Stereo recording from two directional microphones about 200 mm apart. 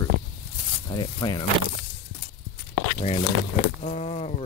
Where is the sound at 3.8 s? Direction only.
35° left (ahead or behind).